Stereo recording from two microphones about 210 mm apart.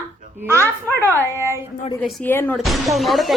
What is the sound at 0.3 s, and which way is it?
Speech, 10° right (ahead or behind).